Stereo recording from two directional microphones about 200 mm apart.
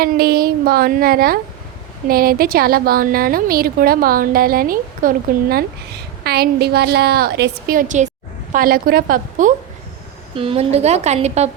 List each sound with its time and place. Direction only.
0.0 s a woman's voice: 50° right (ahead or behind)
10.3 s a woman's voice: 30° right (ahead or behind)